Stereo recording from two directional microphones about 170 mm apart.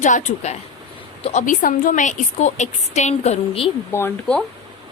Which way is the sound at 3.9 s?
10° left (ahead or behind).